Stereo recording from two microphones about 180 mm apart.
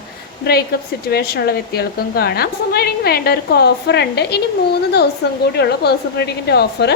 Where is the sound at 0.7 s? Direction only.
60° left (ahead or behind).